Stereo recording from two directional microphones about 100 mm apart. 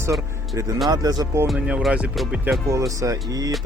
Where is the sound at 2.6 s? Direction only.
35° right (ahead or behind).